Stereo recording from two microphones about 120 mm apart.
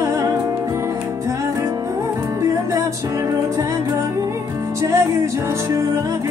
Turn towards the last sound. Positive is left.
turn(degrees=-25)  # may be behind; listen again after turning